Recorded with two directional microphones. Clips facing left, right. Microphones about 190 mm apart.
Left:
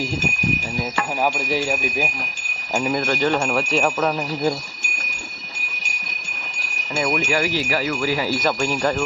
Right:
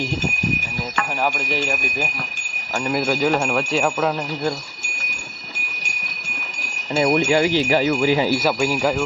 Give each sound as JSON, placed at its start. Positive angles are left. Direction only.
{"t": 0.9, "sound": "speech", "side_deg": 10}
{"t": 2.8, "sound": "speech", "side_deg": -5}
{"t": 7.0, "sound": "speech", "side_deg": -30}
{"t": 8.4, "sound": "speech", "side_deg": -10}